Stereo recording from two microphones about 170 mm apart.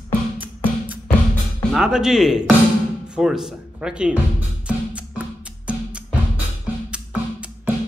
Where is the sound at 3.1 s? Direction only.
5° right (ahead or behind).